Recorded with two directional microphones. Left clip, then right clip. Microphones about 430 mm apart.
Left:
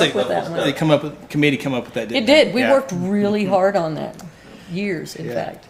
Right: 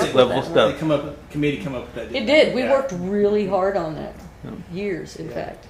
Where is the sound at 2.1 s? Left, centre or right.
Left.